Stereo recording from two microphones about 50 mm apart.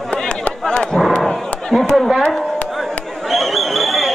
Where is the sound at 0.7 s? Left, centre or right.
Centre.